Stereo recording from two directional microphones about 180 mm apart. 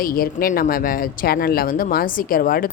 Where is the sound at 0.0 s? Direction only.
55° left (ahead or behind).